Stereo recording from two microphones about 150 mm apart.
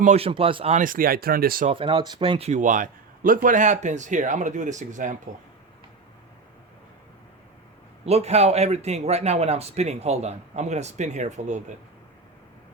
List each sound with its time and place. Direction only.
0.0 s speech: 45° right (ahead or behind)
0.8 s speech: 70° right (ahead or behind)
1.7 s speech: 35° right (ahead or behind)
2.5 s speech: 55° right (ahead or behind)
8.0 s speech: 45° right (ahead or behind)